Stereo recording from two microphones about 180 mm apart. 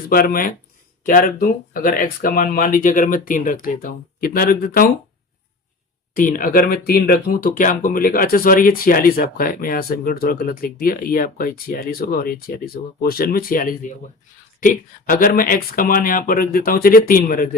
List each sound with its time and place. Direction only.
0.1 s speech: 55° left (ahead or behind)
6.1 s speech: 50° left (ahead or behind)